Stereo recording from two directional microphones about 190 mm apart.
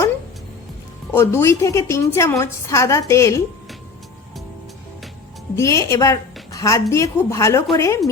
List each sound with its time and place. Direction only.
1.1 s a woman's voice: 15° left (ahead or behind)
5.5 s a woman's voice: 15° left (ahead or behind)